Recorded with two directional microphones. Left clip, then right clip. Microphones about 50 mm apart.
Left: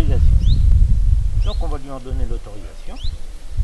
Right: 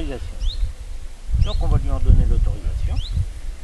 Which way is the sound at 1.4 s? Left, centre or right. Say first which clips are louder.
Right 1 dB; right.